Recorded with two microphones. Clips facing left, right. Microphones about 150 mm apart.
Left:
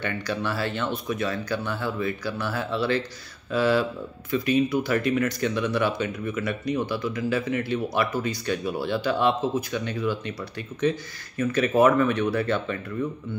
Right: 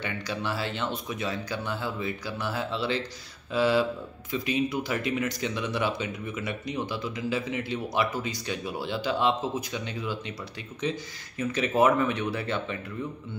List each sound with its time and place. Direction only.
0.0 s speech: 15° right (ahead or behind)